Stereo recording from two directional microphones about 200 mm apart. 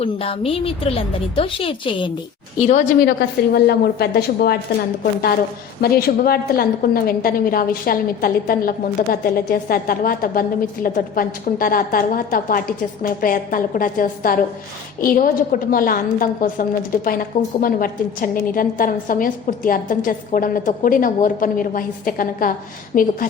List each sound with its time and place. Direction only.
0.0 s speech: 30° left (ahead or behind)
2.6 s a woman's voice: 35° left (ahead or behind)
3.1 s a woman's voice: 55° left (ahead or behind)
5.8 s a woman's voice: 50° left (ahead or behind)